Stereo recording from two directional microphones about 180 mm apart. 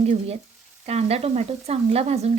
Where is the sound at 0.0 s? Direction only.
35° right (ahead or behind).